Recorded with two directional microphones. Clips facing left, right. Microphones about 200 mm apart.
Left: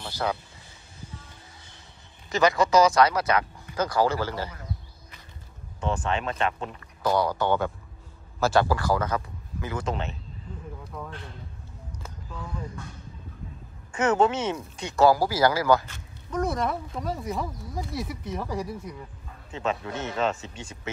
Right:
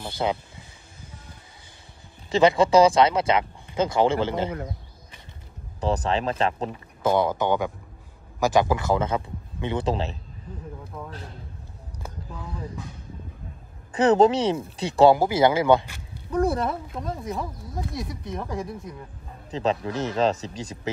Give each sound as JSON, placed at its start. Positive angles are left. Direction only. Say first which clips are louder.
{"t": 0.0, "sound": "speech", "louder": "right 3 dB", "side_deg": -20}
{"t": 2.2, "sound": "speech", "louder": "right 4 dB", "side_deg": -30}
{"t": 5.8, "sound": "speech", "louder": "right 4 dB", "side_deg": -35}
{"t": 10.9, "sound": "a man's voice", "louder": "even", "side_deg": -15}
{"t": 13.9, "sound": "speech", "louder": "right 5 dB", "side_deg": -35}
{"t": 16.9, "sound": "speech", "louder": "even", "side_deg": 0}
{"t": 18.2, "sound": "speech", "louder": "even", "side_deg": -20}
{"t": 18.6, "sound": "speech", "louder": "even", "side_deg": 0}
{"t": 19.5, "sound": "speech", "louder": "right 4 dB", "side_deg": -35}